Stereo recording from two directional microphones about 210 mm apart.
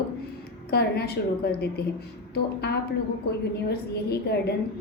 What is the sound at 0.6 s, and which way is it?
A woman's voice, 50° left (ahead or behind).